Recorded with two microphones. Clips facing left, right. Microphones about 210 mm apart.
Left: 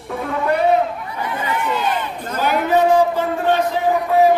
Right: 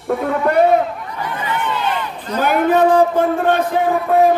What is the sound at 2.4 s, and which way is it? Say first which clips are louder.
A man's voice: right 2 dB; 50° right (ahead or behind).